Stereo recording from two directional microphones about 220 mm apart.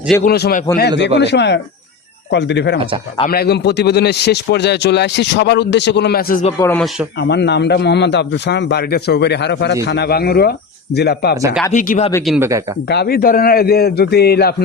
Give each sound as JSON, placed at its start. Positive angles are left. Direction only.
{"t": 0.3, "sound": "a man's voice", "side_deg": 45}
{"t": 6.6, "sound": "speech", "side_deg": 10}
{"t": 7.2, "sound": "a man's voice", "side_deg": 50}
{"t": 11.7, "sound": "speech", "side_deg": 35}
{"t": 12.2, "sound": "speech", "side_deg": 0}
{"t": 12.9, "sound": "a man's voice", "side_deg": 45}